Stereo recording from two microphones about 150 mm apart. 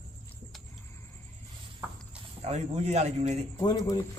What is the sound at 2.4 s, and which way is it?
Speech, 45° right (ahead or behind).